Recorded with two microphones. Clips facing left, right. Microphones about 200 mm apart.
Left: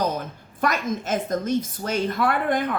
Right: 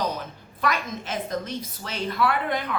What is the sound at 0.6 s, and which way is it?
A woman's voice, 45° left (ahead or behind).